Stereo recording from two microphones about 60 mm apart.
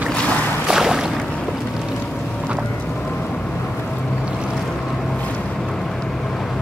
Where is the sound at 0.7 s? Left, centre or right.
Centre.